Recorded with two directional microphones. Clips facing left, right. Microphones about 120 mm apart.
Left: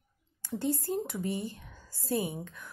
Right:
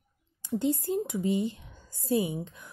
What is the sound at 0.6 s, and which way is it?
A woman's voice, 15° right (ahead or behind).